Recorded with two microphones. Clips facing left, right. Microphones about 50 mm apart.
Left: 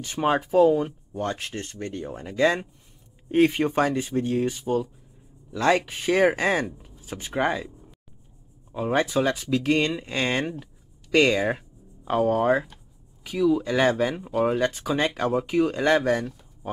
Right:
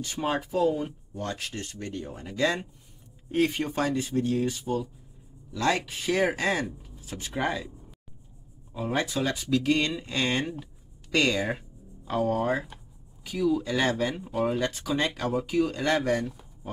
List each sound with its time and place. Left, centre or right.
0.0 s speech: left; by 2.3 s centre
3.3 s speech: left
8.7 s speech: centre
10.6 s a sound: left
12.4 s speech: centre